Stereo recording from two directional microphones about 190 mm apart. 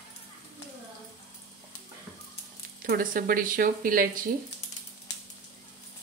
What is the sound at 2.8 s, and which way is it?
Speech, 45° right (ahead or behind).